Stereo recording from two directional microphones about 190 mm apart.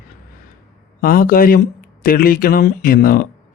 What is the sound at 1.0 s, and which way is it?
Speech, 50° left (ahead or behind).